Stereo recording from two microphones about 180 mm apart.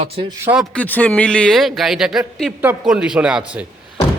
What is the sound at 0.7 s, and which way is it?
Speech, 10° left (ahead or behind).